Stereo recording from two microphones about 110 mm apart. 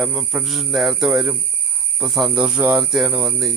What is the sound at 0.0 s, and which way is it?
Speech, 10° right (ahead or behind).